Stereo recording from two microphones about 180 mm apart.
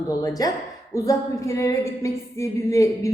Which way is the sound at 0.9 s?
15° left (ahead or behind).